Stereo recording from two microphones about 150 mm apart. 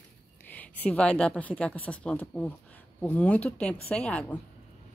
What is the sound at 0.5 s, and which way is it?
Speech, 10° left (ahead or behind).